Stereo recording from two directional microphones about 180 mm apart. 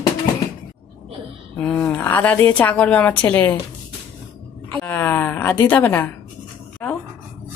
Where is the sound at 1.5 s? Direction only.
5° left (ahead or behind).